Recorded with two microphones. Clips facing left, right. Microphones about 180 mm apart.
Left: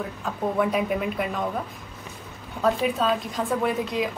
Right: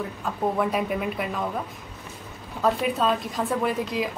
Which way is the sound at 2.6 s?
Centre (ahead or behind).